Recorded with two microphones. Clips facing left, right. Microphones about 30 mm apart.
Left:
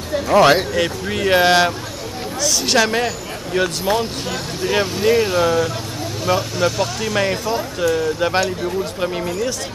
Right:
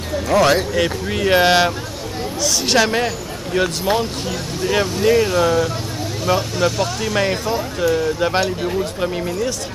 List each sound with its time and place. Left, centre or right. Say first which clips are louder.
0.3 s speech: left 2 dB; centre
0.7 s speech: right 1 dB; centre